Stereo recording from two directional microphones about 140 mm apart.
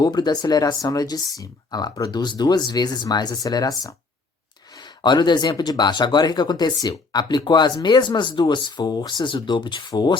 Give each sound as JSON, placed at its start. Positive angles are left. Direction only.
{"t": 0.0, "sound": "speech", "side_deg": 30}